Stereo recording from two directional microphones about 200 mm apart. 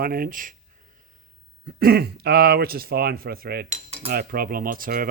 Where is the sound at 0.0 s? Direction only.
45° right (ahead or behind).